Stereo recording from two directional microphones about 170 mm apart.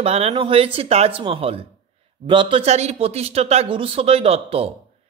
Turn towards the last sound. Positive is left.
turn(degrees=-35)  # may be behind; listen again after turning